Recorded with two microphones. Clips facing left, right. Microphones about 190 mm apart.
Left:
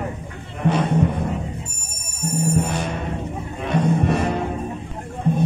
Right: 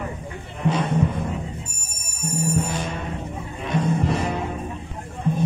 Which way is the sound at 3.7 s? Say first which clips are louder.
Left 3 dB; 65° left (ahead or behind).